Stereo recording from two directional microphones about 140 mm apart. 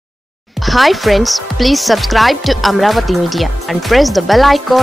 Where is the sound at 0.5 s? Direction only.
Centre (ahead or behind).